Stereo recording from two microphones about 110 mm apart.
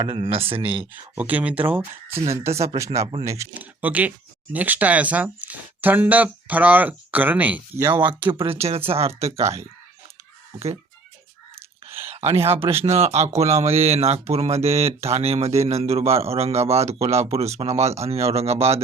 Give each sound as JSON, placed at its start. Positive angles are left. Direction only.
{"t": 0.0, "sound": "speech", "side_deg": -50}
{"t": 0.8, "sound": "speech", "side_deg": -15}
{"t": 3.5, "sound": "speech", "side_deg": -15}
{"t": 8.4, "sound": "speech", "side_deg": -70}
{"t": 12.0, "sound": "speech", "side_deg": -65}
{"t": 12.8, "sound": "speech", "side_deg": -75}